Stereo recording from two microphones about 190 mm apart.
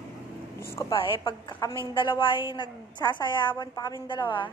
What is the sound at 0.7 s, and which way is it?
Carnatic music, 20° left (ahead or behind).